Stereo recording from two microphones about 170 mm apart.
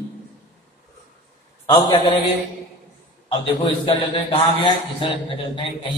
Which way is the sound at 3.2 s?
30° left (ahead or behind).